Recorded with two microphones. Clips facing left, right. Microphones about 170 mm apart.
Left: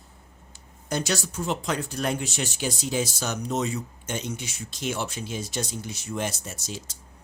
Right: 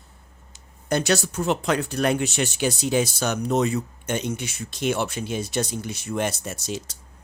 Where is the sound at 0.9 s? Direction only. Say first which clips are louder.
Right 5 dB; 65° right (ahead or behind).